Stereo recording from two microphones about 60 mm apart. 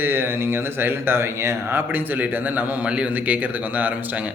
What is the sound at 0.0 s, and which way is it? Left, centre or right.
A man's voice, right.